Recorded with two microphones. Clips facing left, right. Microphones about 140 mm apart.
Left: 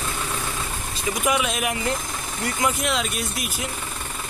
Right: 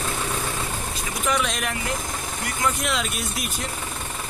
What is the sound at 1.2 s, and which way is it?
Speech, 5° left (ahead or behind).